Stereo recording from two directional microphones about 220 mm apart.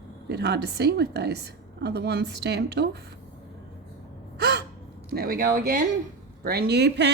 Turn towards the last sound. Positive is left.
turn(degrees=-50)  # may be behind; listen again after turning